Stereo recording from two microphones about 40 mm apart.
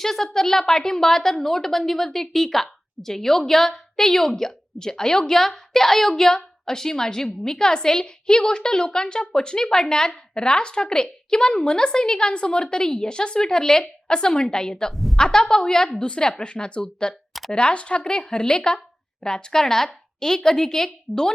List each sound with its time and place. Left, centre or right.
0.0 s a woman's voice: centre
14.9 s a woman's voice: centre
15.2 s a woman's voice: centre